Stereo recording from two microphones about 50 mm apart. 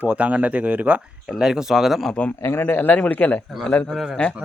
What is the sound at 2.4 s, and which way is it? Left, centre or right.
Speech, left.